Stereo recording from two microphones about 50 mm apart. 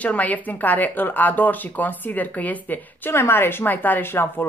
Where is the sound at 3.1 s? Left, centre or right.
Left.